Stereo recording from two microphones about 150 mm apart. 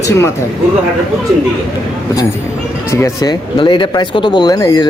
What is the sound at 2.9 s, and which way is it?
Speech, 20° left (ahead or behind).